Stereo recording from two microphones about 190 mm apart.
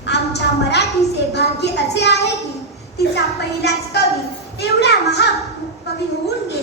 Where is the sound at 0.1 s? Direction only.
60° left (ahead or behind).